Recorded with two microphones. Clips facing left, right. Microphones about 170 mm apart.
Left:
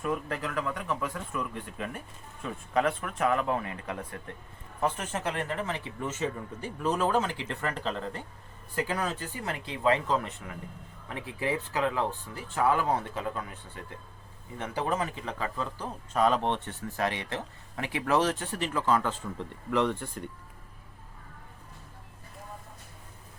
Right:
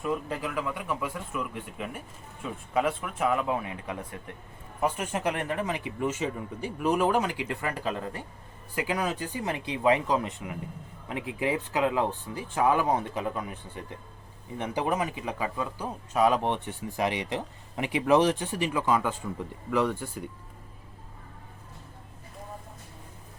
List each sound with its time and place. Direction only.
0.0 s speech: 10° right (ahead or behind)